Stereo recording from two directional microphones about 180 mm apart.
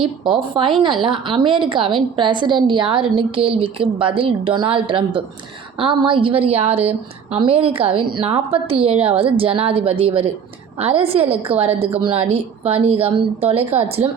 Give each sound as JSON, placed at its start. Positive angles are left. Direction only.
{"t": 0.5, "sound": "a woman's voice", "side_deg": -25}